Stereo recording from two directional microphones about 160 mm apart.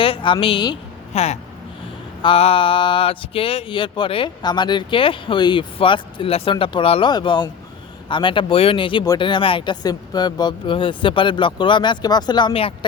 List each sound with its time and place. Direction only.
0.0 s speech: 35° left (ahead or behind)
1.1 s speech: 45° left (ahead or behind)